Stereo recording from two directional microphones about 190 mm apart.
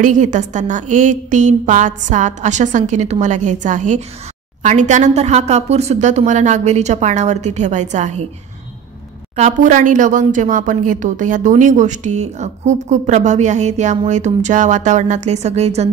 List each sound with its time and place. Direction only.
0.0 s speech: 40° right (ahead or behind)
9.3 s speech: 40° right (ahead or behind)